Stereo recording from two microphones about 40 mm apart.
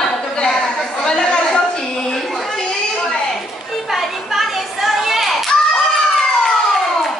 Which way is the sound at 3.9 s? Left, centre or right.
Centre.